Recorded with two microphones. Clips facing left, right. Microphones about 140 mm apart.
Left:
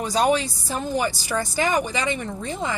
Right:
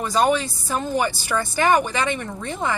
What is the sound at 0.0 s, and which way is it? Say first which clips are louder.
Speech: right 1 dB; 50° right (ahead or behind).